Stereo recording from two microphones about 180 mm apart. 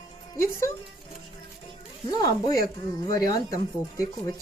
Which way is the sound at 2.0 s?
20° left (ahead or behind).